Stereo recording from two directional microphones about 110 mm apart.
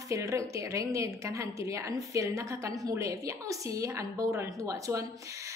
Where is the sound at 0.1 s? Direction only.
30° right (ahead or behind).